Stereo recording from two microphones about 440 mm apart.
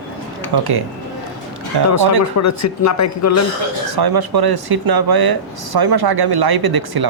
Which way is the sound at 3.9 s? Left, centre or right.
Right.